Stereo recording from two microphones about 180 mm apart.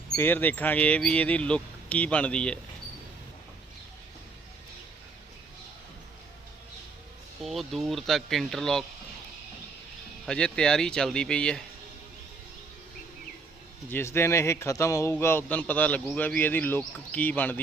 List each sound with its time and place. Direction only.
0.2 s a man's voice: 10° left (ahead or behind)
7.4 s speech: centre (ahead or behind)
10.2 s speech: 5° left (ahead or behind)
13.9 s a man's voice: 15° left (ahead or behind)